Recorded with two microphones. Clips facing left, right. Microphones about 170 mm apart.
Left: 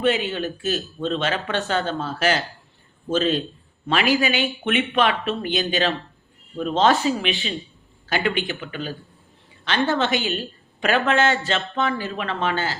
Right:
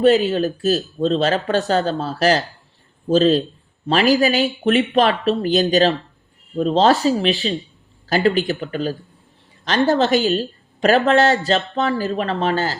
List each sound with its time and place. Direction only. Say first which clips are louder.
0.0 s speech: right 7 dB; 40° right (ahead or behind)